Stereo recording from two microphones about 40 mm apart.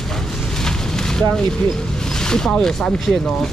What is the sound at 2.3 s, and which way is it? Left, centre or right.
Speech, centre.